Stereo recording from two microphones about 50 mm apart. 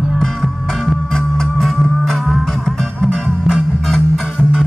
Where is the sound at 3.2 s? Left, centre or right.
Centre.